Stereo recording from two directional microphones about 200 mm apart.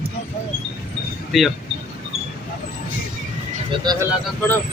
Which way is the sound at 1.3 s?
Centre (ahead or behind).